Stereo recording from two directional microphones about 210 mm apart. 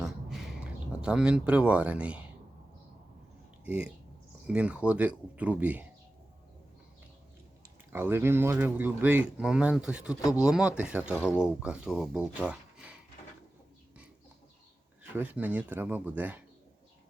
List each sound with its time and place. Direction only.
0.0 s a sound: centre (ahead or behind)
3.6 s speech: 5° right (ahead or behind)
7.9 s speech: 10° right (ahead or behind)
10.2 s speech: 15° left (ahead or behind)
10.4 s speech: 5° right (ahead or behind)
11.2 s speech: 10° left (ahead or behind)
11.4 s speech: 5° right (ahead or behind)
15.1 s speech: 10° right (ahead or behind)